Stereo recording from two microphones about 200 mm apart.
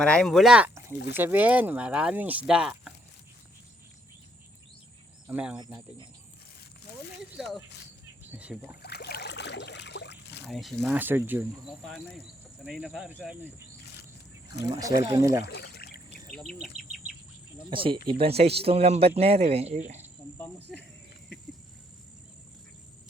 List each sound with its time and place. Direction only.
0.0 s speech: 5° left (ahead or behind)
5.3 s speech: 5° right (ahead or behind)
5.5 s speech: 20° right (ahead or behind)
7.3 s speech: centre (ahead or behind)
8.8 s trickle: 55° left (ahead or behind)
10.4 s speech: centre (ahead or behind)
14.7 s speech: 20° right (ahead or behind)
15.4 s pour: 55° left (ahead or behind)
16.3 s insect: centre (ahead or behind)
17.7 s speech: 25° right (ahead or behind)
20.7 s speech: centre (ahead or behind)